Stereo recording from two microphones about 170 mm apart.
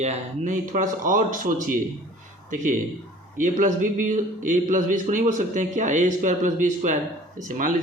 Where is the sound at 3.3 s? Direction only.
50° right (ahead or behind).